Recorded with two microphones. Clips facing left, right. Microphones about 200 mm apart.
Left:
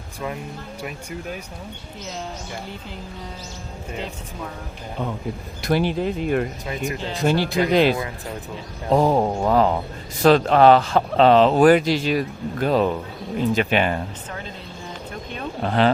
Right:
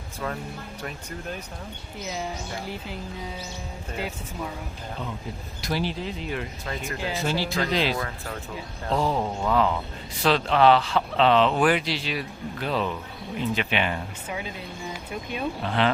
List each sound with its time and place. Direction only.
0.8 s speech: 10° left (ahead or behind)
5.6 s speech: 55° left (ahead or behind)
15.6 s speech: 40° left (ahead or behind)